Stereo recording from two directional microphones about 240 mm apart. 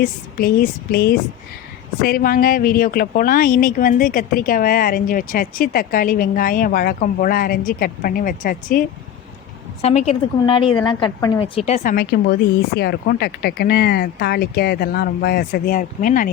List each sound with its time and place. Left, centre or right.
0.0 s a woman's voice: left